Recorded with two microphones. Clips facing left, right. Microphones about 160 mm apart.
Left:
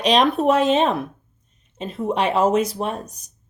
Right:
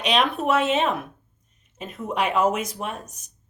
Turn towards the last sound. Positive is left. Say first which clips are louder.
# left 6 dB
turn(degrees=35)  # may be behind; listen again after turning